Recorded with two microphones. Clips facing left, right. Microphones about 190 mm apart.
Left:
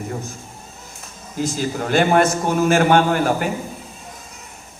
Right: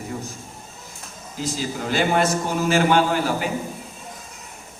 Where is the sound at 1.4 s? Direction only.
50° left (ahead or behind).